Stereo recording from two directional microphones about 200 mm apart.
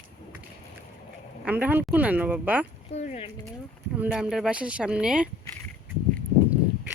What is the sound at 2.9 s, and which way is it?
Speech, 35° left (ahead or behind).